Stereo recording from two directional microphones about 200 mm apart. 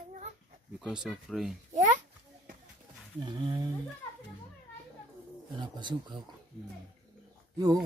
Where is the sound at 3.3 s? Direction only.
20° right (ahead or behind).